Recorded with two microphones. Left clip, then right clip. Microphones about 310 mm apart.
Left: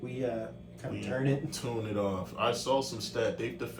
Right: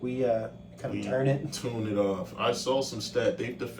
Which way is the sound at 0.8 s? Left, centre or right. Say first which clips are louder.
Right 5 dB; centre.